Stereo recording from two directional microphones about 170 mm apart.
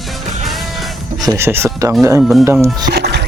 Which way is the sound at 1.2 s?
20° right (ahead or behind).